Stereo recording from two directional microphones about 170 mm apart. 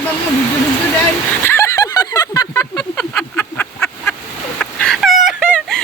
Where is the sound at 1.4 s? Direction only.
15° left (ahead or behind).